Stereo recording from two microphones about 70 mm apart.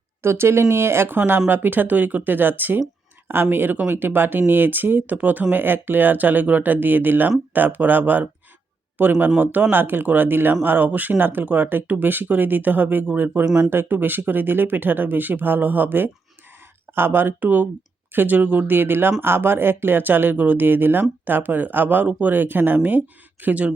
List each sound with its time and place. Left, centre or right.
0.2 s speech: right; by 23.7 s centre